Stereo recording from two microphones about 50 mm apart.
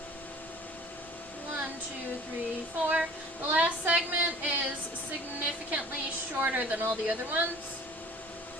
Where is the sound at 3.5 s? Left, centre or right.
Right.